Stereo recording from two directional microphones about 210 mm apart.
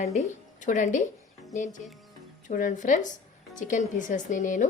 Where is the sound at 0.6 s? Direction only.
35° left (ahead or behind).